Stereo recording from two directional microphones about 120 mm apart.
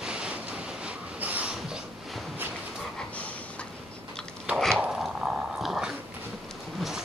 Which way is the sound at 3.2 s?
10° left (ahead or behind).